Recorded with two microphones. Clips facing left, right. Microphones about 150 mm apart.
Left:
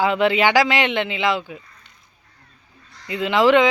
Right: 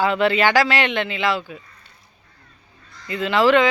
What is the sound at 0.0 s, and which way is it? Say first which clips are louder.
A man's voice: even; 15° left (ahead or behind).